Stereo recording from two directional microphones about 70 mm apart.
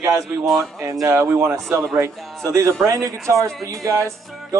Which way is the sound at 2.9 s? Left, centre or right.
Right.